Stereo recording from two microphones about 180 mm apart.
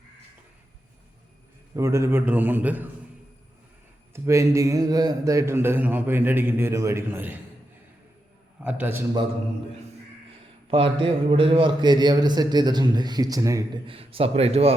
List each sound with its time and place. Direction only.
1.7 s a man's voice: 15° right (ahead or behind)
4.1 s a man's voice: 15° right (ahead or behind)
8.6 s a man's voice: 10° right (ahead or behind)
10.7 s a man's voice: 30° right (ahead or behind)
13.8 s a man's voice: 30° right (ahead or behind)